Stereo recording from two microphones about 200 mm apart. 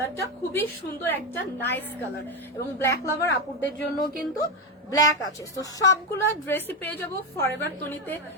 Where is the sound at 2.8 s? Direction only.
10° left (ahead or behind).